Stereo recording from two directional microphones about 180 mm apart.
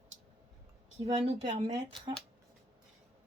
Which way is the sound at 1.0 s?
35° right (ahead or behind).